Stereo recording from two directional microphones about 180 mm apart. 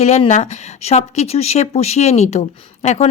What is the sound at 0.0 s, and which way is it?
A woman's voice, 35° left (ahead or behind).